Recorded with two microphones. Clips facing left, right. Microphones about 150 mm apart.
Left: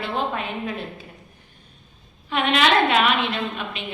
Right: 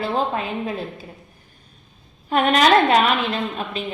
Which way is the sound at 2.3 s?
40° right (ahead or behind).